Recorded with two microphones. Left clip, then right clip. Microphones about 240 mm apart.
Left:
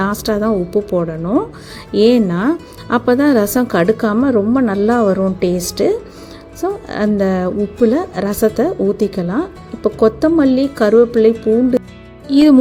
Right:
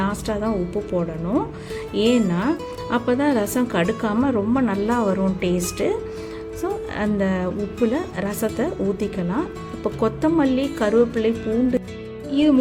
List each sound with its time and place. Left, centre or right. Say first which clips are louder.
0.0 s speech: left 7 dB; left